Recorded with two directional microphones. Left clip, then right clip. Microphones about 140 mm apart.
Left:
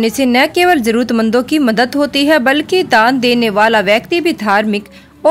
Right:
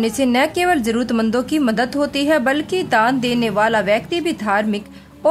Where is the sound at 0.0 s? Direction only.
25° left (ahead or behind).